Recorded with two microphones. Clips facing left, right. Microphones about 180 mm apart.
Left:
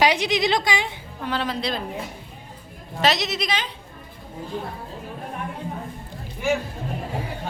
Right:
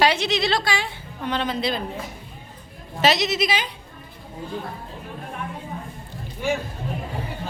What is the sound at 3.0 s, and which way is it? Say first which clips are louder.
Speech: right 2 dB; centre (ahead or behind).